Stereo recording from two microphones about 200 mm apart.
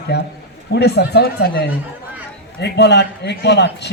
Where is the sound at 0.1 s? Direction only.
60° left (ahead or behind).